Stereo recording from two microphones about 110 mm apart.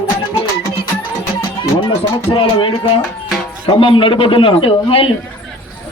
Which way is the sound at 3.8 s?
50° left (ahead or behind).